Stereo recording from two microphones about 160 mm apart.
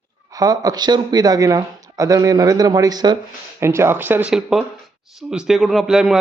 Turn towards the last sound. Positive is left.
turn(degrees=-5)  # may be behind; listen again after turning